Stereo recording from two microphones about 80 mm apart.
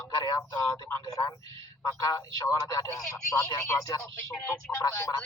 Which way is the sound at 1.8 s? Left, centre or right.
Left.